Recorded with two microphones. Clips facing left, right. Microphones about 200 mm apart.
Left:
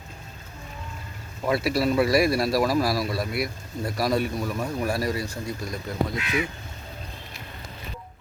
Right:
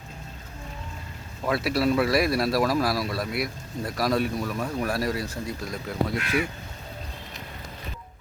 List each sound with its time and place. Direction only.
1.5 s speech: centre (ahead or behind)
6.1 s speech: 50° right (ahead or behind)